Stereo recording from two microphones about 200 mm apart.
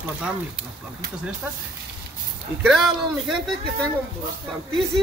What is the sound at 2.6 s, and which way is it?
Speech, centre (ahead or behind).